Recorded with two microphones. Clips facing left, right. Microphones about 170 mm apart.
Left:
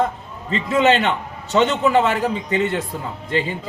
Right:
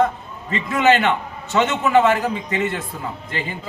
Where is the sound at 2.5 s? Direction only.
30° left (ahead or behind).